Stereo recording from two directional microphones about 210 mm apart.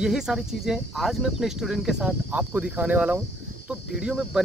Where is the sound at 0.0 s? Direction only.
5° right (ahead or behind).